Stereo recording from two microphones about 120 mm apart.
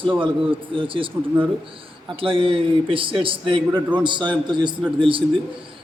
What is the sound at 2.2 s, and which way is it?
A man's voice, 45° right (ahead or behind).